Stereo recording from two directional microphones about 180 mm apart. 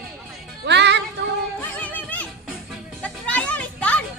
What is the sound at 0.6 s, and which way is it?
Music, 75° right (ahead or behind).